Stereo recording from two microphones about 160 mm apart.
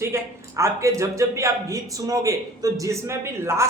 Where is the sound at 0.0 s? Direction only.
20° right (ahead or behind).